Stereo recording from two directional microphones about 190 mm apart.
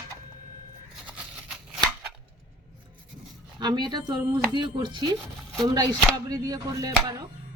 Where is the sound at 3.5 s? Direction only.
20° right (ahead or behind).